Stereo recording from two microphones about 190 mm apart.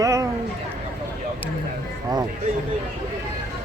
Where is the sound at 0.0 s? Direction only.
15° right (ahead or behind).